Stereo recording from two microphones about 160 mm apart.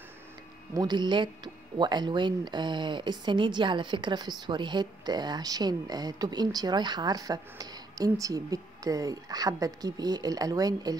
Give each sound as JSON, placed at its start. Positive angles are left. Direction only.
{"t": 0.7, "sound": "speech", "side_deg": -25}